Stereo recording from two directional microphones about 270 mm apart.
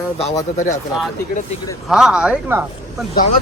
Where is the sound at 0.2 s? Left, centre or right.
Left.